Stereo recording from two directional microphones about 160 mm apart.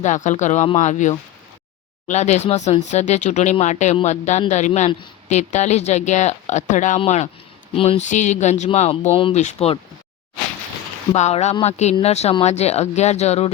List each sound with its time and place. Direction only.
0.0 s speech: 50° left (ahead or behind)
11.1 s speech: 45° left (ahead or behind)